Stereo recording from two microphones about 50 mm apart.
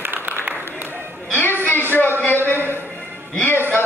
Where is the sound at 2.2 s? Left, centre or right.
Left.